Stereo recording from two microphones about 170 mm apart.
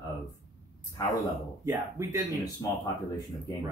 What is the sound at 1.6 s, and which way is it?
Speech, 15° right (ahead or behind).